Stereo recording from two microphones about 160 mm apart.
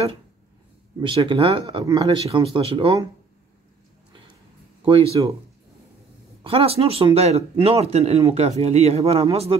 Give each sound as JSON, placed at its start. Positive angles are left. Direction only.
{"t": 1.0, "sound": "speech", "side_deg": -30}
{"t": 4.8, "sound": "speech", "side_deg": -35}
{"t": 6.4, "sound": "speech", "side_deg": -35}